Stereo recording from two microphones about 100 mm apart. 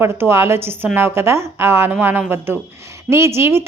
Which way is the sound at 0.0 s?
25° right (ahead or behind).